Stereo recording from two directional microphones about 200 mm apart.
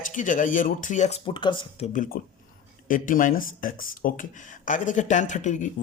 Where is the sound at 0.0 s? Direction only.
40° left (ahead or behind); by 1.9 s 25° left (ahead or behind).